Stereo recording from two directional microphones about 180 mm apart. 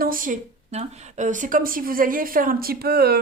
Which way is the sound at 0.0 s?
50° right (ahead or behind).